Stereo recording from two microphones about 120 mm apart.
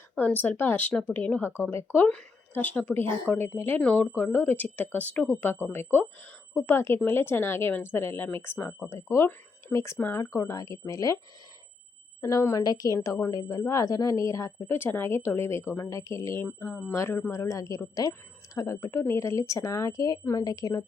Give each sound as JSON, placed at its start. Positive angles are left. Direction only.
{"t": 0.2, "sound": "a woman's voice", "side_deg": 10}
{"t": 8.9, "sound": "speech", "side_deg": 25}
{"t": 12.2, "sound": "speech", "side_deg": 25}